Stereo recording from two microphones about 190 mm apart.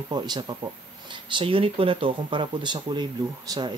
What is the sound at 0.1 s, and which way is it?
Speech, 25° right (ahead or behind).